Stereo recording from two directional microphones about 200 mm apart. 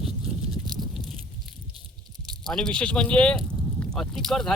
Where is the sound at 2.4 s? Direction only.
Centre (ahead or behind).